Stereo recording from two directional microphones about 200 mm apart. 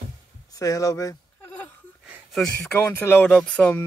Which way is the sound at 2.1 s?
Centre (ahead or behind).